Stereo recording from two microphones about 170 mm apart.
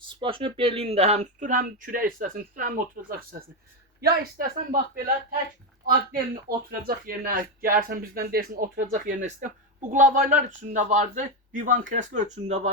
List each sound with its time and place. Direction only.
0.2 s speech: 30° right (ahead or behind)